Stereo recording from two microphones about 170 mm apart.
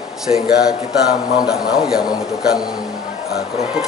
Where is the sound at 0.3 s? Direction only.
35° left (ahead or behind).